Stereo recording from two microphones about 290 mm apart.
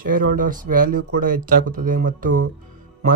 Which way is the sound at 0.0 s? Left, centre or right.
Right.